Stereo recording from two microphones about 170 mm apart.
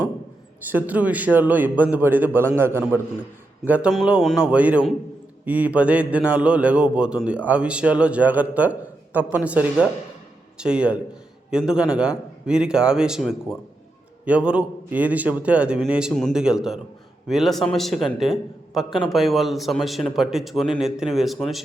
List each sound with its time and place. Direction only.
0.7 s a man's voice: 10° right (ahead or behind)